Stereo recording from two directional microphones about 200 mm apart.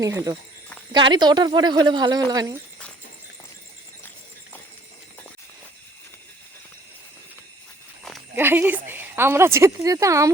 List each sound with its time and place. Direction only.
0.0 s speech: 15° right (ahead or behind)
8.4 s speech: 10° right (ahead or behind)